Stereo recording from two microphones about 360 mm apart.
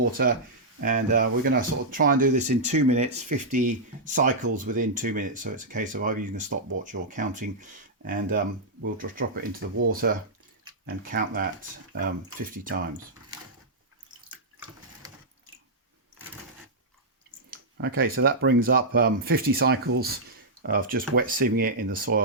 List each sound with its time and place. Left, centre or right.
0.2 s speech: right
17.5 s speech: right